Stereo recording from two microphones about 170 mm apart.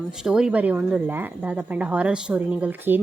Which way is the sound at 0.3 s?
5° right (ahead or behind).